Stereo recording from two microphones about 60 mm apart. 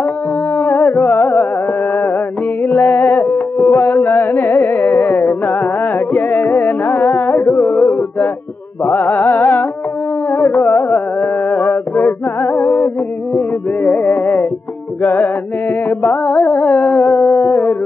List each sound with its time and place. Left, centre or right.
0.7 s music: left
2.6 s music: left
3.8 s carnatic music: left
4.8 s music: left
9.2 s music: left
10.3 s music: left
17.3 s a sound: left